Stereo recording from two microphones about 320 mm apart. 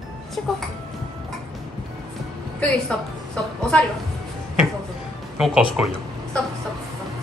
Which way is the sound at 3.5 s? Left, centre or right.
Centre.